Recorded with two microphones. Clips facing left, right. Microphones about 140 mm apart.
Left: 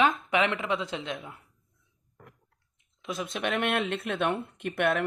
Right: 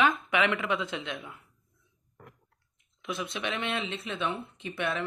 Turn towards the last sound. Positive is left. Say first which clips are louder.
# left 6 dB
turn(degrees=55)  # may be behind; listen again after turning